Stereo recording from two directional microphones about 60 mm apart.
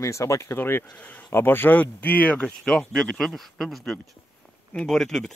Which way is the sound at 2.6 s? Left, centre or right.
Centre.